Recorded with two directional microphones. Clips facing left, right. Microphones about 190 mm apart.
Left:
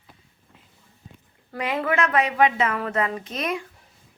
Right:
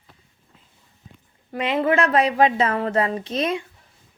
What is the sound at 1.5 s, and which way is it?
A woman's voice, 20° right (ahead or behind).